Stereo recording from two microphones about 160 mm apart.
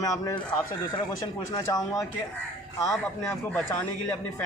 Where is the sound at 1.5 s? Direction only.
20° left (ahead or behind).